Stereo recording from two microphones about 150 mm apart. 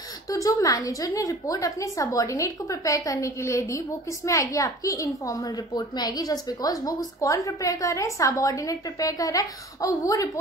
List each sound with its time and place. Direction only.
0.3 s a woman's voice: 20° left (ahead or behind)